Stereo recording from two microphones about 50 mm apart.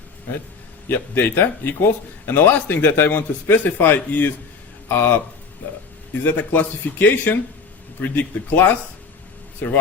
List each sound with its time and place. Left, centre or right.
0.9 s a man's voice: left
4.9 s speech: left
6.2 s a man's voice: left